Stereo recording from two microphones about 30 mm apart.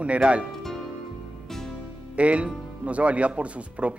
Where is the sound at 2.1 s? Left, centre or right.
Right.